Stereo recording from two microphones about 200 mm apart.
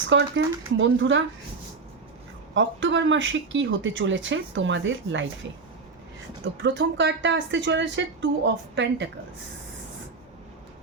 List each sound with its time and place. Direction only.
0.1 s speech: 70° right (ahead or behind)
2.6 s speech: 65° right (ahead or behind)
6.6 s speech: 65° right (ahead or behind)